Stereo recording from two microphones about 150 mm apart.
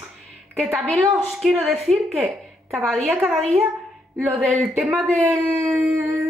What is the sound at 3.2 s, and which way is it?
A woman's voice, centre (ahead or behind).